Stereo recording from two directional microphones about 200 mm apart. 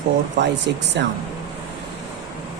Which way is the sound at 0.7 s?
55° right (ahead or behind).